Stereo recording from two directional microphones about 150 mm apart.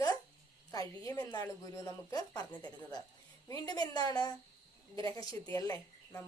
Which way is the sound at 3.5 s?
25° left (ahead or behind).